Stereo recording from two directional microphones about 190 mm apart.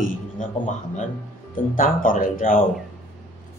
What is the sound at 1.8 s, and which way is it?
Speech, 45° left (ahead or behind).